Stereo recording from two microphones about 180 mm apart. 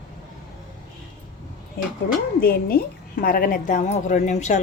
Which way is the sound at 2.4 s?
55° left (ahead or behind).